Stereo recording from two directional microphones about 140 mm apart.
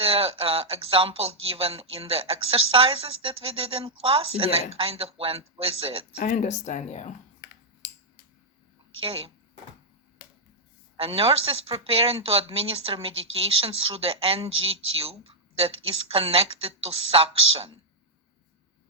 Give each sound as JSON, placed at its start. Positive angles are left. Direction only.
{"t": 0.0, "sound": "speech", "side_deg": -45}
{"t": 6.2, "sound": "speech", "side_deg": 65}
{"t": 9.0, "sound": "speech", "side_deg": -45}
{"t": 10.9, "sound": "speech", "side_deg": -45}